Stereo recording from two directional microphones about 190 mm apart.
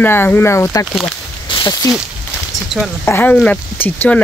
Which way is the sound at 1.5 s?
20° left (ahead or behind).